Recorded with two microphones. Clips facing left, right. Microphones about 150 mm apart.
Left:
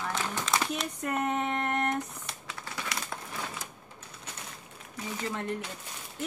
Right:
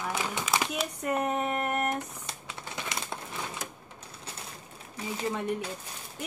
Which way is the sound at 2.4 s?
20° right (ahead or behind).